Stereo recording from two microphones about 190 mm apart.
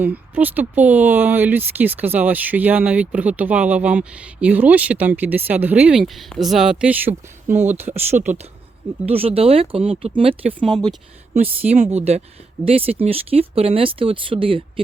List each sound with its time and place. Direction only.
0.0 s speech: 10° right (ahead or behind)
7.8 s speech: 35° right (ahead or behind)
11.8 s speech: 35° right (ahead or behind)